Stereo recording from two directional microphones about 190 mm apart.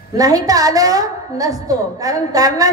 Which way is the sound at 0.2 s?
20° right (ahead or behind).